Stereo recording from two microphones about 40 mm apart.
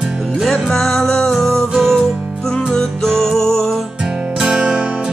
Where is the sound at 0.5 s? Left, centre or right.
Centre.